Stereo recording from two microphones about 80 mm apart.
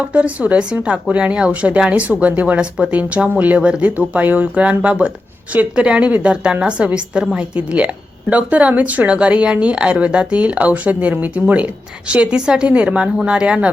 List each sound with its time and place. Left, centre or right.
0.1 s speech: centre